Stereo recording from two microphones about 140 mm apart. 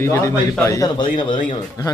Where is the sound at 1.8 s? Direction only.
30° left (ahead or behind).